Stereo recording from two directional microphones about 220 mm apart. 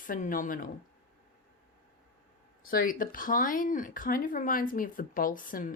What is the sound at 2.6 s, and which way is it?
Speech, 40° left (ahead or behind).